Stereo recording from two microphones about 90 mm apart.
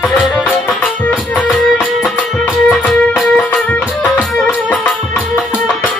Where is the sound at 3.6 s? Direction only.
15° left (ahead or behind).